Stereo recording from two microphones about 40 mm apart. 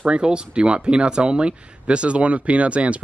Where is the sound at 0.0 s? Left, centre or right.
Right.